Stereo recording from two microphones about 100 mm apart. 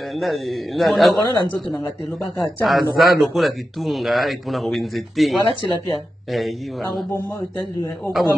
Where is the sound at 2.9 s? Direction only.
Centre (ahead or behind).